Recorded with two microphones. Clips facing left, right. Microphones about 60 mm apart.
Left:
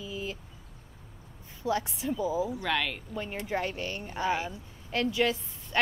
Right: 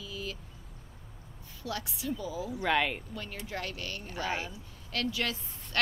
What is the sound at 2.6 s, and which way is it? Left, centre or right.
Speech, centre.